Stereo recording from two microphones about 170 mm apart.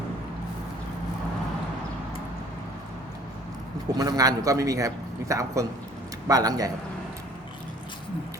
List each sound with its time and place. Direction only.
3.9 s a man's voice: 20° right (ahead or behind)